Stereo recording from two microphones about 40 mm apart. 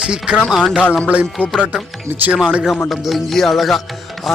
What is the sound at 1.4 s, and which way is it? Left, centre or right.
Speech, left.